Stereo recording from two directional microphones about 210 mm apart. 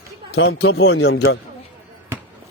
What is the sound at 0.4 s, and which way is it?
Speech, 50° left (ahead or behind).